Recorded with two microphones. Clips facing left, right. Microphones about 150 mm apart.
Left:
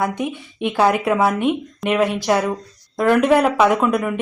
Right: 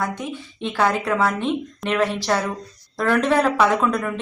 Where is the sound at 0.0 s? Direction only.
20° left (ahead or behind).